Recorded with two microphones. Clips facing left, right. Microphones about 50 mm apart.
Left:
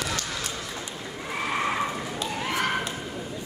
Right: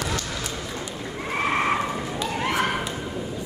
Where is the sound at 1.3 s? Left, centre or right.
Right.